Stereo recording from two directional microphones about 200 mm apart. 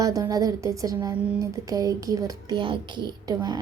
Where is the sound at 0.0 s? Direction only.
15° right (ahead or behind).